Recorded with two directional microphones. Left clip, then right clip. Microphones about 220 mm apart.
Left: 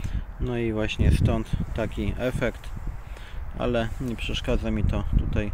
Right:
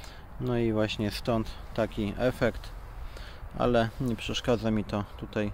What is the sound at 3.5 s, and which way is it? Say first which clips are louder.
Speech: right 1 dB; 5° right (ahead or behind).